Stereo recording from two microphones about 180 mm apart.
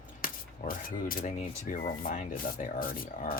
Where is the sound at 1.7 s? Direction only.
50° left (ahead or behind).